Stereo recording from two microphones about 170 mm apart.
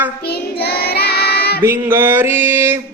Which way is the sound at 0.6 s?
65° left (ahead or behind).